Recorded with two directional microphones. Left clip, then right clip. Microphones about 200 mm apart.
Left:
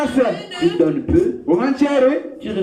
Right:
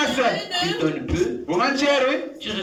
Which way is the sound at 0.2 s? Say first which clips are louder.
Left 3 dB; 40° left (ahead or behind).